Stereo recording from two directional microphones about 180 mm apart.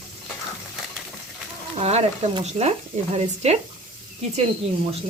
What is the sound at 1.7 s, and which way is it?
Speech, 35° right (ahead or behind).